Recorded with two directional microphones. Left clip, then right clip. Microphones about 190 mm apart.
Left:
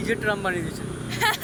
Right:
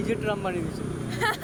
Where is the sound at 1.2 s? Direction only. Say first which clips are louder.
Left 4 dB; 25° right (ahead or behind).